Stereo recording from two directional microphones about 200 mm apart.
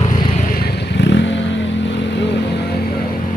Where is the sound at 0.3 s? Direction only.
45° left (ahead or behind); by 2.7 s 60° left (ahead or behind).